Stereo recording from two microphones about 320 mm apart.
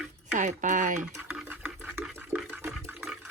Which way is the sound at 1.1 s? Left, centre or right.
Centre.